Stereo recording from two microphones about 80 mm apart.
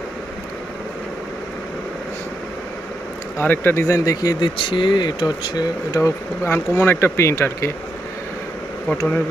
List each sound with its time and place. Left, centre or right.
3.3 s speech: left
3.9 s speech: left
4.4 s speech: left
5.9 s speech: left